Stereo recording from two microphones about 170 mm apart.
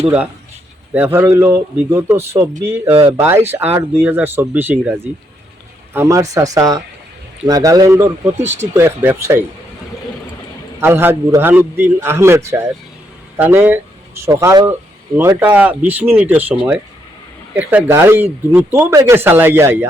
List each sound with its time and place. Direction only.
0.9 s speech: 10° right (ahead or behind)
2.9 s speech: 30° right (ahead or behind)
3.2 s speech: 15° right (ahead or behind)
10.8 s speech: 15° right (ahead or behind)